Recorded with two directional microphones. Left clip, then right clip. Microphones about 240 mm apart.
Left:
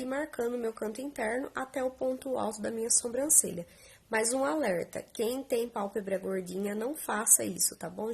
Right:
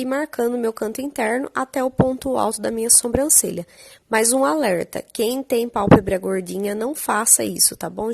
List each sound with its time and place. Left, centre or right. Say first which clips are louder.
0.0 s a woman's voice: right 11 dB; right